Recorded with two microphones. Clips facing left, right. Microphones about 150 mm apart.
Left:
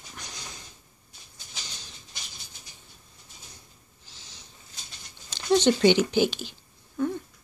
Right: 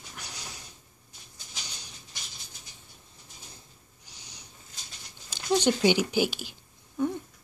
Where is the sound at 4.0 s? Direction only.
15° right (ahead or behind).